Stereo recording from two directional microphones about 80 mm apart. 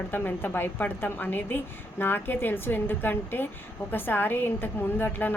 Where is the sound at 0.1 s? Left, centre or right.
Left.